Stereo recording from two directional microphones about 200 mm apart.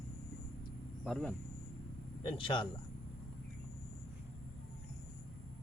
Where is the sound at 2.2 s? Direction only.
25° left (ahead or behind).